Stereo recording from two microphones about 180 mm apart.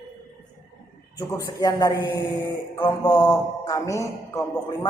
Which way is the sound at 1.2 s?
20° left (ahead or behind).